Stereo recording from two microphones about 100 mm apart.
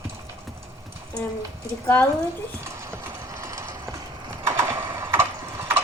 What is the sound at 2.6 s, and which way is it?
Clip-clop, 25° right (ahead or behind).